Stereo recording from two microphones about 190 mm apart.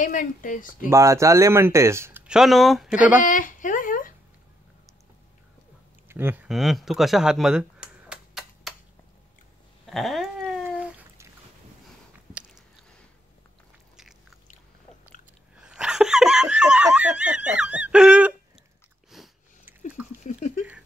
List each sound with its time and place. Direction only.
0.0 s speech: 45° left (ahead or behind)
0.8 s speech: 15° right (ahead or behind)
3.2 s a sound: 45° left (ahead or behind)
6.0 s a sound: 10° right (ahead or behind)
9.8 s cat: centre (ahead or behind)
13.9 s biting: centre (ahead or behind)
15.6 s laughter: 5° right (ahead or behind)
19.0 s biting: centre (ahead or behind)
20.2 s patter: 40° left (ahead or behind)